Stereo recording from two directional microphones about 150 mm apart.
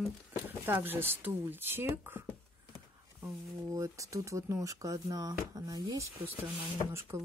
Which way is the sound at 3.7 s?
20° right (ahead or behind).